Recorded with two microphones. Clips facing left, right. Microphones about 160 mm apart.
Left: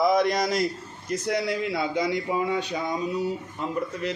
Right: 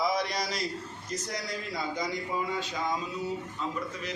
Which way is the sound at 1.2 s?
60° left (ahead or behind).